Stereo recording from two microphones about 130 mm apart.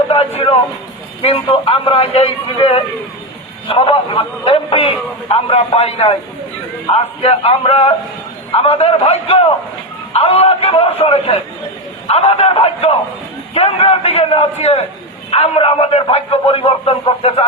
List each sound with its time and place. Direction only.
0.3 s a man's voice: 50° left (ahead or behind)